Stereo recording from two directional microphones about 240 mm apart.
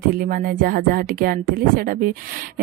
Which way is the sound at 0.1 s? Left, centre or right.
Right.